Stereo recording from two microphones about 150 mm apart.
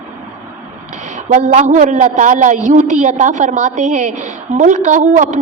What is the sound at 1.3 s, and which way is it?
A woman's voice, 50° right (ahead or behind).